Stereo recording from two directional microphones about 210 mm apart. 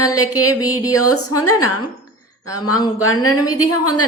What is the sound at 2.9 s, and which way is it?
Speech, 85° left.